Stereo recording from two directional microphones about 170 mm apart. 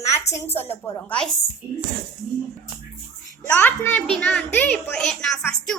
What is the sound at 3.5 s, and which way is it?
A child's voice, 10° left (ahead or behind).